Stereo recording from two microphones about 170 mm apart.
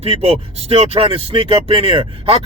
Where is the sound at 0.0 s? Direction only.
35° right (ahead or behind).